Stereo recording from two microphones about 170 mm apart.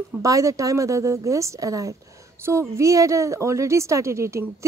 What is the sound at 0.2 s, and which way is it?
A woman's voice, 20° right (ahead or behind).